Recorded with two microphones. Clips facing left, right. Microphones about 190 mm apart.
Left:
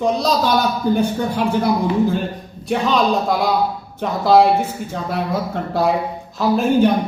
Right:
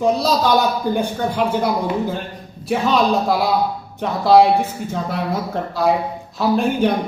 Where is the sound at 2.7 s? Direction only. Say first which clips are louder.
Even; centre (ahead or behind).